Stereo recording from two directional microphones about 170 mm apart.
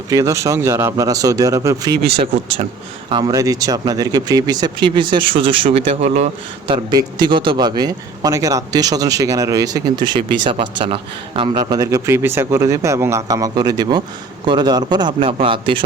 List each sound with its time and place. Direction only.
0.1 s a man's voice: 20° right (ahead or behind)
3.1 s a man's voice: 25° right (ahead or behind)